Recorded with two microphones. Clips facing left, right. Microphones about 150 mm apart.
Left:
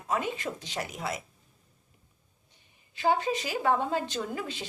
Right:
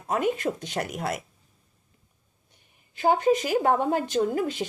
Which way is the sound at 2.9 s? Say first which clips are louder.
Right 6 dB; 45° right (ahead or behind).